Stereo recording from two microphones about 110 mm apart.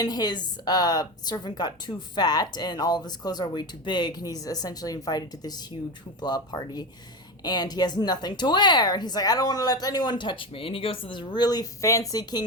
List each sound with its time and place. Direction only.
0.0 s a woman's voice: 40° left (ahead or behind)